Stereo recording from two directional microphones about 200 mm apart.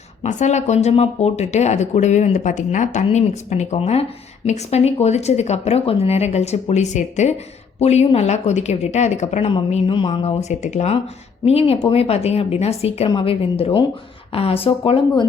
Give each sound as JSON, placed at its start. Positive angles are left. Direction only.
{"t": 0.2, "sound": "speech", "side_deg": 35}